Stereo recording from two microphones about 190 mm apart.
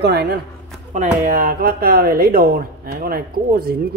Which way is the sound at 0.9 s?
45° right (ahead or behind).